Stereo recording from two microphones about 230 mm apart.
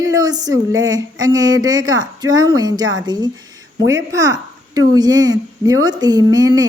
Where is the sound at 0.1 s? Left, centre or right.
Centre.